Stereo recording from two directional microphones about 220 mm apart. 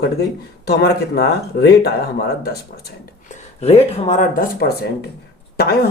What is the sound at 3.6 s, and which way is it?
Speech, 35° left (ahead or behind).